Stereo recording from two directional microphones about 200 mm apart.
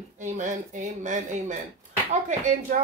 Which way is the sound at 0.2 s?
40° right (ahead or behind).